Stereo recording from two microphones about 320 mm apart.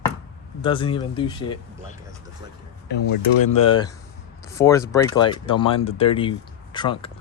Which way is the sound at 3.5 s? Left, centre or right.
Centre.